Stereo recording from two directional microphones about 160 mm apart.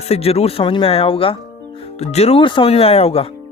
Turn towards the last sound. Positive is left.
turn(degrees=35)  # may be behind; listen again after turning